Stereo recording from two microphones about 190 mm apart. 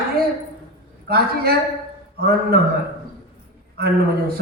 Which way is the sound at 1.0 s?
55° right (ahead or behind).